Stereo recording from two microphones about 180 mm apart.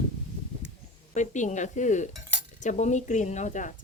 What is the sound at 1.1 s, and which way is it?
Speech, 40° left (ahead or behind).